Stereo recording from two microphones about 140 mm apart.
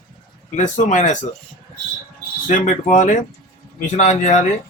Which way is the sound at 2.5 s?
65° left (ahead or behind).